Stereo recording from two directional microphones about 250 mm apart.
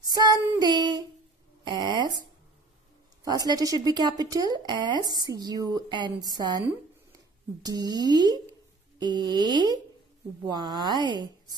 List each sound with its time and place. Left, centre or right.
0.0 s speech: centre
3.3 s speech: centre